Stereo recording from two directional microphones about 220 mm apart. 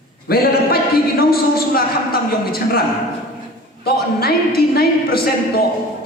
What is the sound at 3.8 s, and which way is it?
A woman's voice, 45° left (ahead or behind).